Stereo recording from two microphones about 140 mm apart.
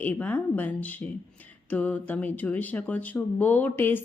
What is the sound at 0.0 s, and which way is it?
Speech, 10° left (ahead or behind).